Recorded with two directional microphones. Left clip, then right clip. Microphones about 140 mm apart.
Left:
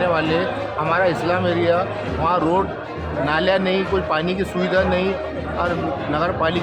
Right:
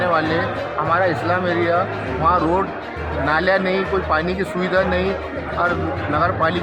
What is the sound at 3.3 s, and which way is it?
Speech, 15° left (ahead or behind).